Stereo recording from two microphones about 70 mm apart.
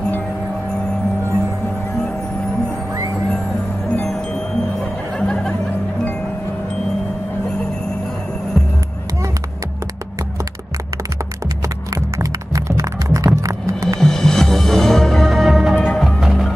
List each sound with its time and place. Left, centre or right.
5.2 s music: centre
11.9 s music: right
13.9 s music: centre
15.7 s music: centre
16.0 s music: centre